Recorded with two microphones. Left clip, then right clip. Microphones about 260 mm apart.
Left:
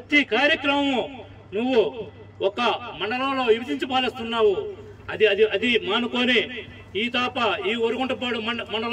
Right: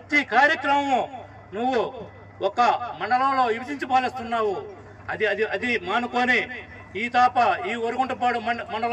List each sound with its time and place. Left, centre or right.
0.1 s a man's voice: centre